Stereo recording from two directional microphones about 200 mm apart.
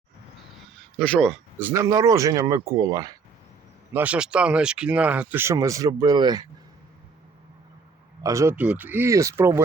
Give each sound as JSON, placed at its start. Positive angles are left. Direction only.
{"t": 0.8, "sound": "speech", "side_deg": 5}
{"t": 1.5, "sound": "speech", "side_deg": -10}
{"t": 3.9, "sound": "speech", "side_deg": -5}
{"t": 8.2, "sound": "speech", "side_deg": -15}